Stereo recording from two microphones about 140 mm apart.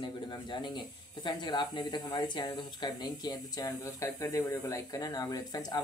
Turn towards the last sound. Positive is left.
turn(degrees=25)  # may be behind; listen again after turning